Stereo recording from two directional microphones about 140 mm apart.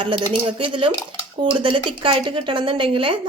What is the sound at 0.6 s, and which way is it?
Speech, 35° right (ahead or behind).